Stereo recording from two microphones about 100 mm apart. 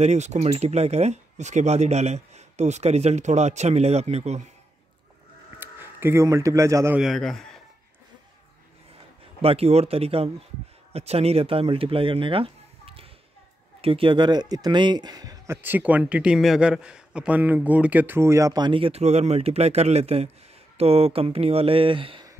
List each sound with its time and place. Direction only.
0.0 s speech: 90° right
5.6 s a sound: 20° right (ahead or behind)
6.2 s a man's voice: 35° right (ahead or behind)
7.0 s a man's voice: centre (ahead or behind)
9.4 s speech: 80° right
10.9 s speech: 90° right; by 15.3 s 40° right (ahead or behind)
15.4 s speech: 25° right (ahead or behind)
18.6 s speech: 60° right (ahead or behind)